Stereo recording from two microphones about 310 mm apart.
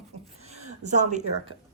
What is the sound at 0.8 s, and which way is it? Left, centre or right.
Speech, right.